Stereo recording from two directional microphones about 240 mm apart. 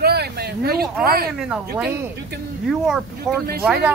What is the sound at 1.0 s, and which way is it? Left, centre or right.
Speech, right.